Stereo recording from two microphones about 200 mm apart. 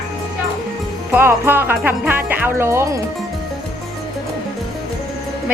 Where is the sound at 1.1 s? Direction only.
10° right (ahead or behind).